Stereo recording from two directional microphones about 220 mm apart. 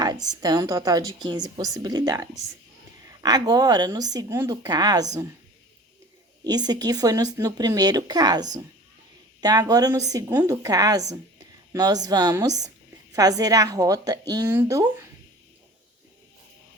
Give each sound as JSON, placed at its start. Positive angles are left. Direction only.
{"t": 0.4, "sound": "speech", "side_deg": -15}
{"t": 6.4, "sound": "speech", "side_deg": -20}